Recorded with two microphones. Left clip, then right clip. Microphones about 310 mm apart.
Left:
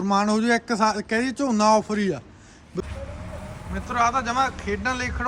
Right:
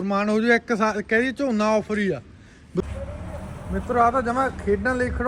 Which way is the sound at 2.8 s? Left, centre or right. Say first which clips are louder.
Right 4 dB; centre.